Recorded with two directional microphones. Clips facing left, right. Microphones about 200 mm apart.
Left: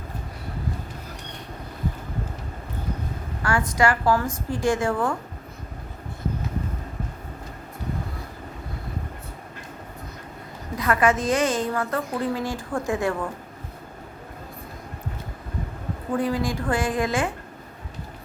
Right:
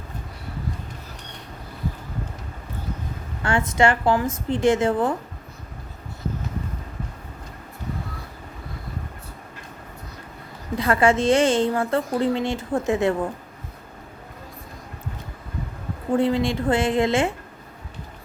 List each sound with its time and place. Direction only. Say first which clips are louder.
3.4 s a woman's voice: right 2 dB; 25° right (ahead or behind)
10.8 s a woman's voice: right 2 dB; 30° right (ahead or behind)
16.1 s a woman's voice: right 4 dB; 25° right (ahead or behind)